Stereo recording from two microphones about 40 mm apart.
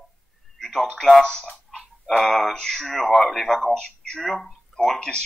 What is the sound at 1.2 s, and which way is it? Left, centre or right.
Speech, left.